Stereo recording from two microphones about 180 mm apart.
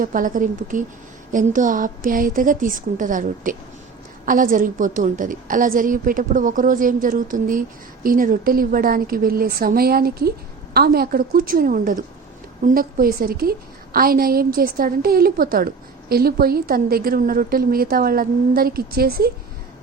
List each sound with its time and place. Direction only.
0.0 s a woman's voice: 50° right (ahead or behind)